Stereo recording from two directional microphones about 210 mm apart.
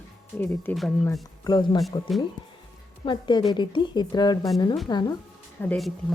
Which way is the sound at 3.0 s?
25° left (ahead or behind).